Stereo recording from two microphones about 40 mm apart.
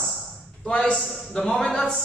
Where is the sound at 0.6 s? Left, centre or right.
Left.